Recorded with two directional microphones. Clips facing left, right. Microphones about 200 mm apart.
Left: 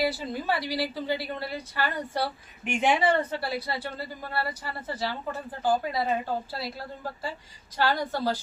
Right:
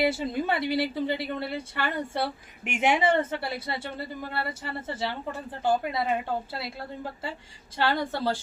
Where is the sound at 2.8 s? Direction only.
20° right (ahead or behind).